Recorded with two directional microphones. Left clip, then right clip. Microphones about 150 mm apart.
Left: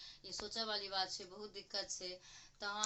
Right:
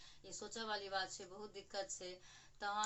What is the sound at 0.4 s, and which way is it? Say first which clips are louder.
Speech: left 2 dB; 5° right (ahead or behind).